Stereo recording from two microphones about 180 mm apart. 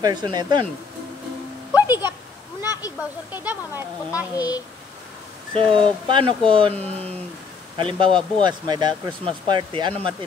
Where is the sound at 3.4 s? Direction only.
10° right (ahead or behind).